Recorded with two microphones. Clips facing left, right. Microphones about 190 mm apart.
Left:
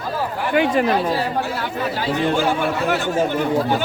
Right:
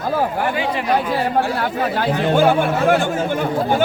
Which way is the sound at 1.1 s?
55° right (ahead or behind).